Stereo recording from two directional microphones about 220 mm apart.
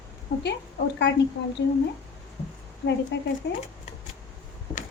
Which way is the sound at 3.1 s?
50° left (ahead or behind).